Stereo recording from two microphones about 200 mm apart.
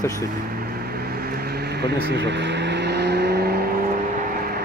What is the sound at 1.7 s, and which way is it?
Vehicle, 60° right (ahead or behind).